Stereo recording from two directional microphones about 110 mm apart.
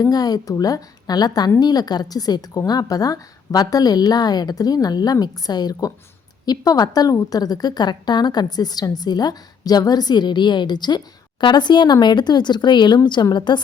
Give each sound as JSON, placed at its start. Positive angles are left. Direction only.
{"t": 0.0, "sound": "a woman's voice", "side_deg": 35}